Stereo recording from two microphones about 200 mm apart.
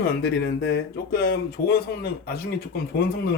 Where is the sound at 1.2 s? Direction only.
50° left (ahead or behind).